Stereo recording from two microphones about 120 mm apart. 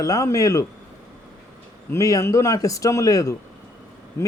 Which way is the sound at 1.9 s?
25° left (ahead or behind).